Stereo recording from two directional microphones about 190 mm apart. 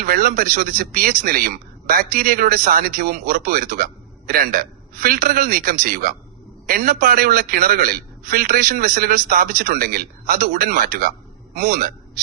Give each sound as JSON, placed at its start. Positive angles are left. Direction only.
{"t": 0.0, "sound": "a man's voice", "side_deg": -50}